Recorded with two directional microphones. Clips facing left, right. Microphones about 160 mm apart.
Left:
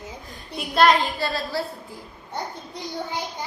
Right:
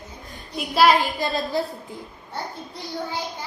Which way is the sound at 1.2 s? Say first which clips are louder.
Right 2 dB; 20° right (ahead or behind).